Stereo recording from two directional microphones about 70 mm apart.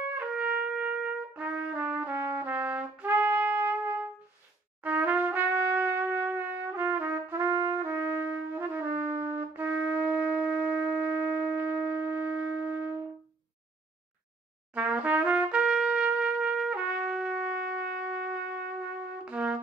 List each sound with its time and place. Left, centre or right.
0.1 s trumpet: right
8.5 s music: right
14.7 s trumpet: centre
19.2 s music: centre